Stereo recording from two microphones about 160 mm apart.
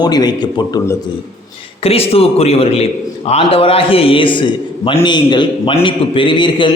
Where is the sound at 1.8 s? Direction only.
35° left (ahead or behind).